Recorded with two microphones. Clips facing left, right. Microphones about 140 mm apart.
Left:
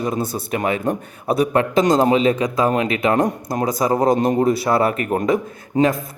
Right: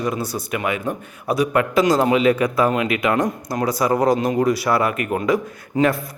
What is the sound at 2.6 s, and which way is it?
A man's voice, 30° left (ahead or behind).